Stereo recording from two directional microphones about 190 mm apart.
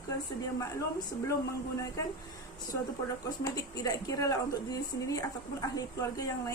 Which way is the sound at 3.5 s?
20° left (ahead or behind).